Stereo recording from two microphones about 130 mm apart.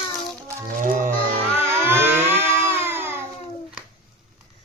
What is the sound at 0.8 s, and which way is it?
Wild animals, 90° right.